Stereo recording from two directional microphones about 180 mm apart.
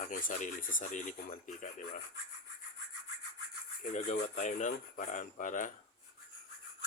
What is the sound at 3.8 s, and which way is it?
Speech, 40° left (ahead or behind).